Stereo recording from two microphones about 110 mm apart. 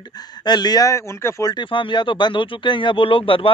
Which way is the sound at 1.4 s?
45° left (ahead or behind).